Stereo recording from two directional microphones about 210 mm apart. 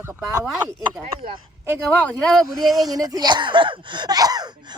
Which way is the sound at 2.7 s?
20° right (ahead or behind).